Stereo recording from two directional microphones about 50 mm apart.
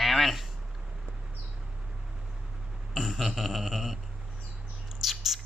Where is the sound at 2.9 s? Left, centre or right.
Centre.